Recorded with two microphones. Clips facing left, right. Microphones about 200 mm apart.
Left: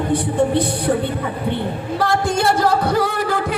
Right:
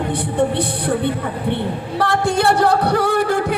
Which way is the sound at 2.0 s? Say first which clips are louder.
Right 1 dB; 65° right (ahead or behind).